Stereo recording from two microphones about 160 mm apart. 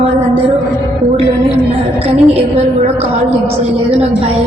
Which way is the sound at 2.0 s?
40° right (ahead or behind).